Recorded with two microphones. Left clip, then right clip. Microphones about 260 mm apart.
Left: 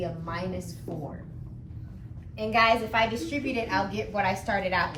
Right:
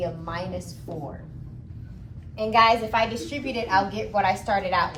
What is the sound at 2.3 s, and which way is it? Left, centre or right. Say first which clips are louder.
A woman's voice: right 4 dB; centre.